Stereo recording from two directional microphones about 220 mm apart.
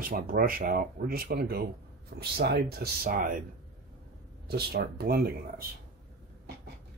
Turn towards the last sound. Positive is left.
turn(degrees=-45)  # may be behind; listen again after turning